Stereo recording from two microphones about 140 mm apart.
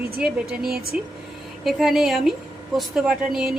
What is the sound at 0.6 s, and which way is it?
Speech, 90° right.